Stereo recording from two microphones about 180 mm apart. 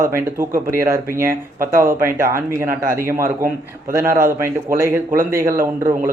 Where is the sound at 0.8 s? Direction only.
15° right (ahead or behind).